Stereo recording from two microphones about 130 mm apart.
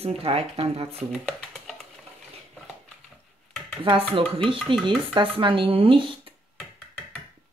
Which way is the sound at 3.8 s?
40° right (ahead or behind).